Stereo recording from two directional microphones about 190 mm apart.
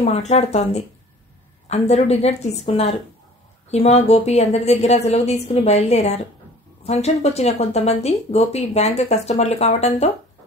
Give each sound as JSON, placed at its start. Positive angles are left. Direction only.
{"t": 0.0, "sound": "speech", "side_deg": 35}